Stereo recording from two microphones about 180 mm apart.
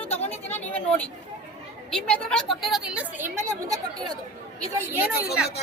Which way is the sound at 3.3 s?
20° right (ahead or behind).